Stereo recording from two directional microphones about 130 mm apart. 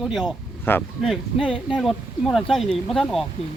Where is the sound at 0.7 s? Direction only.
15° left (ahead or behind).